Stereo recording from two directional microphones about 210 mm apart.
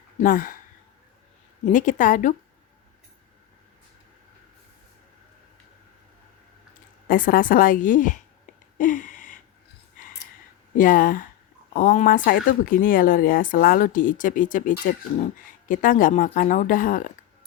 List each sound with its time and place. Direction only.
0.2 s speech: 40° left (ahead or behind)
1.7 s speech: 40° left (ahead or behind)
7.1 s speech: 40° left (ahead or behind)
8.8 s a sound: 40° left (ahead or behind)
10.8 s speech: 40° left (ahead or behind)